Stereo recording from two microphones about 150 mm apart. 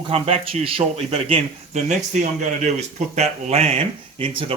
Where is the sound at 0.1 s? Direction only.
40° right (ahead or behind).